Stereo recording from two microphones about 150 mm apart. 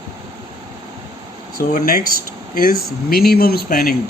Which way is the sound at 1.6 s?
75° left (ahead or behind).